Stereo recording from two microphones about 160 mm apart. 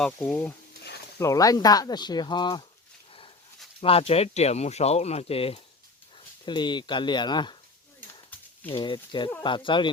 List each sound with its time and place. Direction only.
0.0 s speech: 5° left (ahead or behind)
0.8 s a sound: 90° left
1.2 s speech: 20° left (ahead or behind)
3.8 s speech: 35° left (ahead or behind)
8.7 s speech: 30° left (ahead or behind)